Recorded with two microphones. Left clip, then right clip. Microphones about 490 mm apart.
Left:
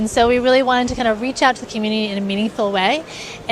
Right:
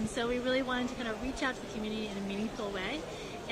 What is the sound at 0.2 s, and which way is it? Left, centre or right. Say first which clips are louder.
A woman's voice: left 19 dB; left.